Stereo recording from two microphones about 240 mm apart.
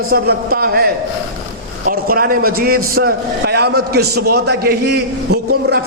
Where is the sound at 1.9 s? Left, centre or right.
Right.